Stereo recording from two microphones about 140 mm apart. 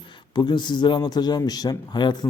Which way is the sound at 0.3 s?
35° left (ahead or behind).